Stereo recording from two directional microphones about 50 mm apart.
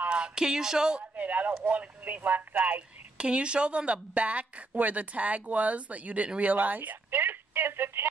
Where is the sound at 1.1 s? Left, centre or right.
Right.